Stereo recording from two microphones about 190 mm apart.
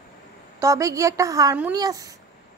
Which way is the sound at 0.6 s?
15° right (ahead or behind).